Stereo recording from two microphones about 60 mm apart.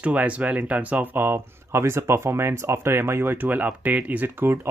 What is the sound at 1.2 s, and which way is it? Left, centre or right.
Speech, right.